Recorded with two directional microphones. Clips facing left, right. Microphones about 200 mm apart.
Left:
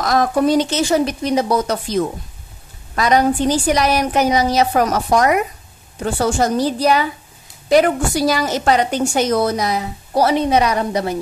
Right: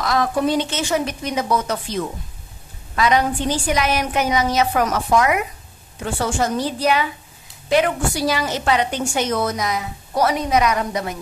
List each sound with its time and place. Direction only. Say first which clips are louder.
0.0 s a woman's voice: left 4 dB; 45° left (ahead or behind)